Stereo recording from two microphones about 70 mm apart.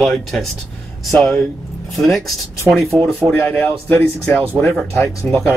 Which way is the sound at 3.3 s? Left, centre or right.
Left.